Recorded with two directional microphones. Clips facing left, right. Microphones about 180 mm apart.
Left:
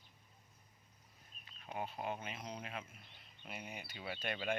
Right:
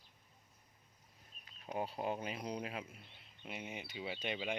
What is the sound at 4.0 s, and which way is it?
Speech, 20° right (ahead or behind).